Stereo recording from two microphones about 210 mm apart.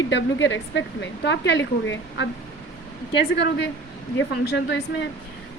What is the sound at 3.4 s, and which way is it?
Speech, 55° left (ahead or behind).